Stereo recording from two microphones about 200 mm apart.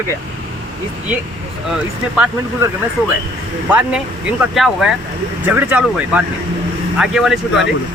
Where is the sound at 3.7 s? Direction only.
5° right (ahead or behind).